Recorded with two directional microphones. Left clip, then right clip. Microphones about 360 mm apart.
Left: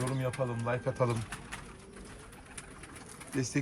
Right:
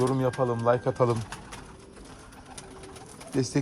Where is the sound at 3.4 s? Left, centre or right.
Centre.